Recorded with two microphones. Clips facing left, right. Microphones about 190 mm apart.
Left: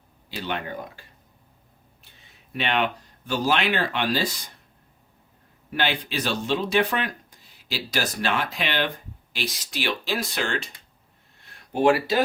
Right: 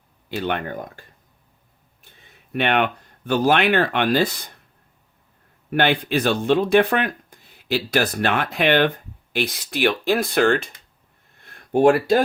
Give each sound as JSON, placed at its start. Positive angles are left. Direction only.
{"t": 0.3, "sound": "speech", "side_deg": -55}
{"t": 2.0, "sound": "speech", "side_deg": -55}
{"t": 5.7, "sound": "speech", "side_deg": -55}
{"t": 11.3, "sound": "a sound", "side_deg": -50}